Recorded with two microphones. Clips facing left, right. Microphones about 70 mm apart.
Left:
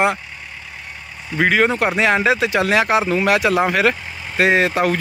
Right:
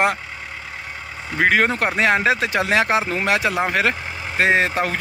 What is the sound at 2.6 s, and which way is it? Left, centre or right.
A man's voice, right.